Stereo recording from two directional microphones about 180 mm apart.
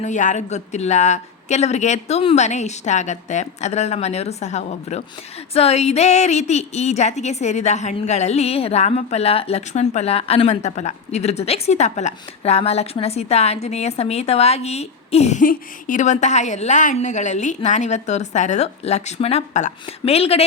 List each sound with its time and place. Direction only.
0.0 s a woman's voice: 45° left (ahead or behind)